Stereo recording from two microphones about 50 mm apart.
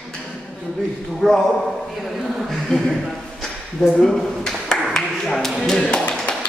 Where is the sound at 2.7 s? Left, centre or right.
Centre.